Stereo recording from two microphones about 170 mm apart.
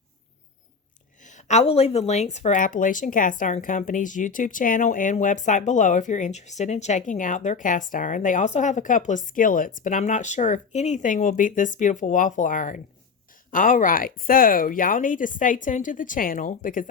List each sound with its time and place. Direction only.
1.2 s speech: 45° left (ahead or behind)